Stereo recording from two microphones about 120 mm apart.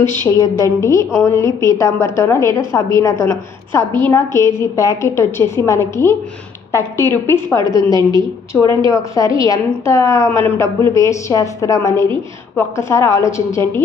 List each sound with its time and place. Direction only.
0.3 s a woman's voice: 30° left (ahead or behind)